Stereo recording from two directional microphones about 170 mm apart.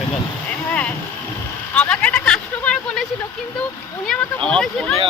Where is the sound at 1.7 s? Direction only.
10° left (ahead or behind).